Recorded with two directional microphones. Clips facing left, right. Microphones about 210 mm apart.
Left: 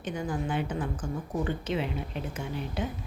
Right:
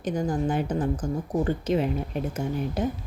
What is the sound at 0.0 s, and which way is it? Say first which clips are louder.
A woman's voice: right 6 dB; 40° right (ahead or behind).